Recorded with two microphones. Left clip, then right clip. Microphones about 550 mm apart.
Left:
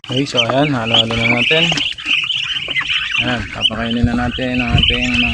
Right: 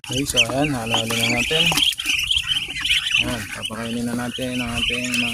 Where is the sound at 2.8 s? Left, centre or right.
Right.